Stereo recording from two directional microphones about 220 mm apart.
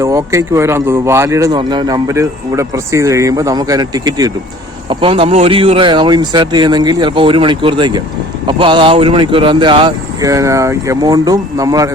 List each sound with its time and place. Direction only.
0.0 s speech: 15° right (ahead or behind)